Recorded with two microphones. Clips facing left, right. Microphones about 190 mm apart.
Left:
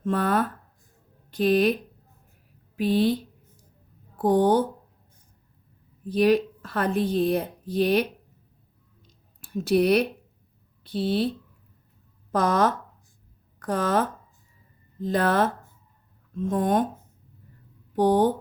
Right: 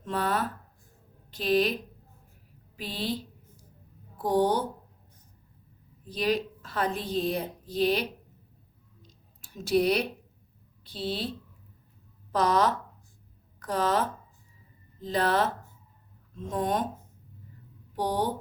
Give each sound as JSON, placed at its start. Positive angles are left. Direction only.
{"t": 0.0, "sound": "a woman's voice", "side_deg": 50}
{"t": 2.7, "sound": "a woman's voice", "side_deg": 55}
{"t": 4.2, "sound": "speech", "side_deg": 50}
{"t": 6.1, "sound": "a woman's voice", "side_deg": 60}
{"t": 9.0, "sound": "a sound", "side_deg": 55}
{"t": 10.8, "sound": "a woman's voice", "side_deg": 60}
{"t": 12.3, "sound": "speech", "side_deg": 50}
{"t": 17.9, "sound": "speech", "side_deg": 50}